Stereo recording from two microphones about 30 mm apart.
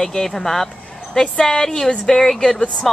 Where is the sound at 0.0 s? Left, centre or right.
Centre.